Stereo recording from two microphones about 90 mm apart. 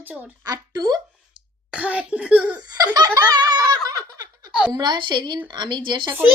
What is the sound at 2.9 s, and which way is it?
Giggle, 50° right (ahead or behind).